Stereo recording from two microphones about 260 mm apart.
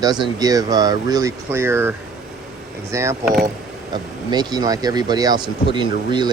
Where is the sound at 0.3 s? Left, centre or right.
Centre.